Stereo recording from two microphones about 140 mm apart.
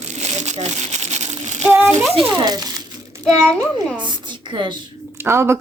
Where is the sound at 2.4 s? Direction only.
25° right (ahead or behind).